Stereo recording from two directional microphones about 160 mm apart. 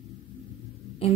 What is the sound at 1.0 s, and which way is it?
Speech, 35° left (ahead or behind).